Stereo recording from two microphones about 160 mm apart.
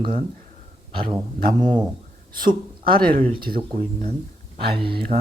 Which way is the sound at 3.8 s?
65° right (ahead or behind).